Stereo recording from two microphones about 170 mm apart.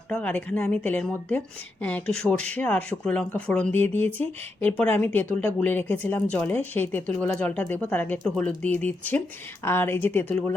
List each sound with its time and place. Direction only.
0.1 s a woman's voice: 10° left (ahead or behind)